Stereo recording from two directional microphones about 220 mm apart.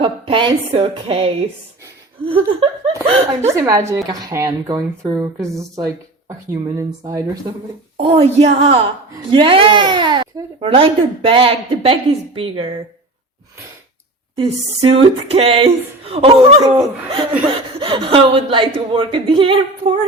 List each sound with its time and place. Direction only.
0.0 s speech: 20° right (ahead or behind)
2.6 s speech: 25° right (ahead or behind)
3.5 s speech: 15° right (ahead or behind)
14.3 s speech: 25° right (ahead or behind)
17.7 s speech: 25° right (ahead or behind)